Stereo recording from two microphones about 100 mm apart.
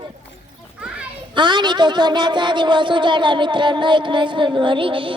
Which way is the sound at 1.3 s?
50° right (ahead or behind).